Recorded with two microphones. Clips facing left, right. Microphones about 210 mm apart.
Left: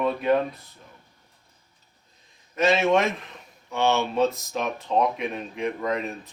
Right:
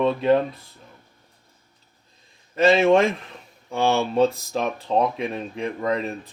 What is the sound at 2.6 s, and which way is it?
Speech, 30° right (ahead or behind).